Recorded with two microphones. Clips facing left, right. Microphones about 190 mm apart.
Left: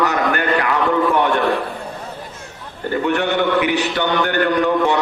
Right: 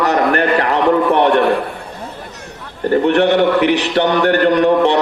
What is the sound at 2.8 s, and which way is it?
A man's voice, 35° right (ahead or behind).